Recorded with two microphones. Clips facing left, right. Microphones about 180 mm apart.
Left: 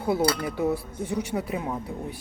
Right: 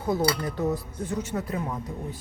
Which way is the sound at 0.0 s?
10° left (ahead or behind).